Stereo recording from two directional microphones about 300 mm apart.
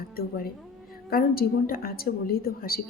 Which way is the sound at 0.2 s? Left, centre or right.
Left.